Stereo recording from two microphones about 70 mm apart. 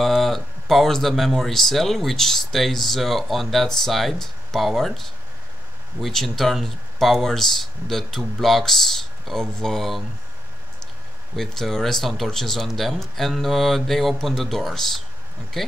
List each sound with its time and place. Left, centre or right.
0.0 s speech: centre
11.3 s speech: centre